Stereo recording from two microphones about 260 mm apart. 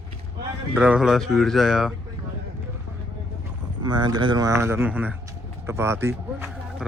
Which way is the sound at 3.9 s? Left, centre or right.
Centre.